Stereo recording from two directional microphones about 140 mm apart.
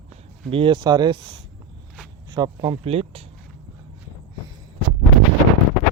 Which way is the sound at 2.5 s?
40° right (ahead or behind).